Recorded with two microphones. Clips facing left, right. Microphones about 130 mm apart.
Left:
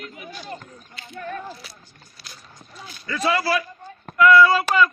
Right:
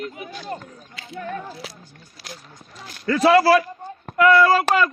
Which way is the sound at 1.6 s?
90° right.